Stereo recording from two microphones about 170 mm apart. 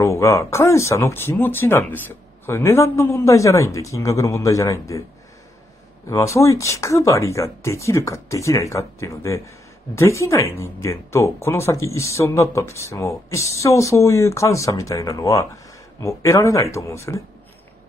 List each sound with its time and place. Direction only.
0.0 s speech: 15° left (ahead or behind)
6.0 s speech: 15° left (ahead or behind)